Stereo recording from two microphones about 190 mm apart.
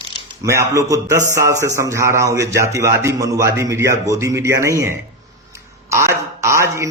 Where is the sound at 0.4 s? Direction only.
15° right (ahead or behind).